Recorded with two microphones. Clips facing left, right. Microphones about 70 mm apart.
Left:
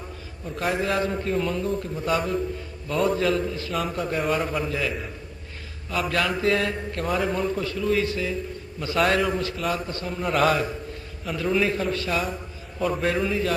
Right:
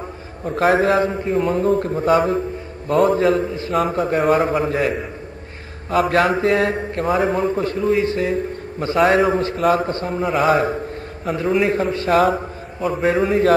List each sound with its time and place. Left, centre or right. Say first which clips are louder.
0.6 s a man's voice: right 9 dB; right
1.1 s a man's voice: right 6 dB; right
1.5 s a man's voice: right 9 dB; right
3.9 s a man's voice: right 8 dB; right
8.9 s a man's voice: right 7 dB; right
9.6 s a man's voice: right 10 dB; right
9.9 s a man's voice: right 7 dB; right
10.2 s a man's voice: right 3 dB; centre
10.5 s a man's voice: right 8 dB; right
11.3 s a man's voice: right 5 dB; right